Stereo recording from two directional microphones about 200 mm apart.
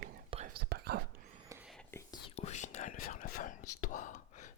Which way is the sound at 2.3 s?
35° left (ahead or behind).